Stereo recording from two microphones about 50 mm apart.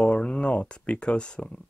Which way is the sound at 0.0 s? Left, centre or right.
Left.